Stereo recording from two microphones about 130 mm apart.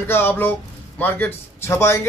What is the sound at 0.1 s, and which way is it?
Speech, 15° left (ahead or behind).